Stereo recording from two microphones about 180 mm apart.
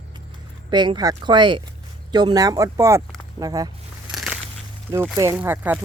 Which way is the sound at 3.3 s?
20° right (ahead or behind).